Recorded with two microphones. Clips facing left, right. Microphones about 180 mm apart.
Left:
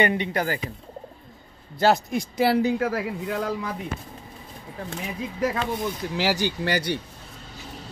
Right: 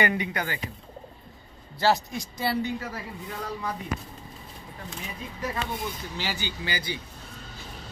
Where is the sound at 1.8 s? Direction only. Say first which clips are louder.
Left 4 dB; 55° left (ahead or behind); by 3.5 s 90° left.